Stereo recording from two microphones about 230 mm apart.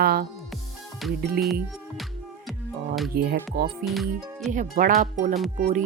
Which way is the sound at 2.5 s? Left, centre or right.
Centre.